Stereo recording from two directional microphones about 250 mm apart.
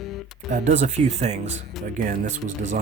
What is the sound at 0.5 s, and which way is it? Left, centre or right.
Speech, right.